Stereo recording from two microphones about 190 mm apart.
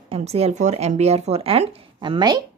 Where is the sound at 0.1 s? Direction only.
35° right (ahead or behind).